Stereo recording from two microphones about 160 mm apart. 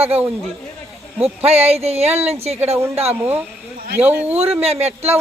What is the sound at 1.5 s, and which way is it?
Speech, 40° right (ahead or behind).